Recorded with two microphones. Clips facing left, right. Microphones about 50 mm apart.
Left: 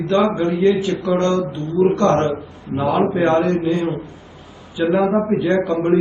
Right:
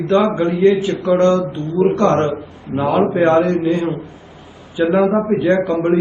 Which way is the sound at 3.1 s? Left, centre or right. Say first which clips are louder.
Right 3 dB; centre.